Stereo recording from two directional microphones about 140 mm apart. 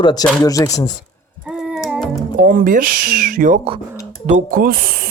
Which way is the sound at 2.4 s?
75° right (ahead or behind).